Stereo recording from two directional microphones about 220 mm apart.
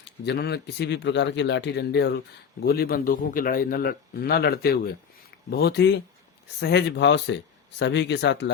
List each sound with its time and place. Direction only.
0.3 s a man's voice: 50° left (ahead or behind)